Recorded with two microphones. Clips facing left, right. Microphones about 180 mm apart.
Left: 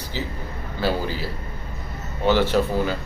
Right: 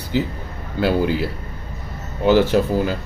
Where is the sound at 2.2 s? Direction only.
45° right (ahead or behind).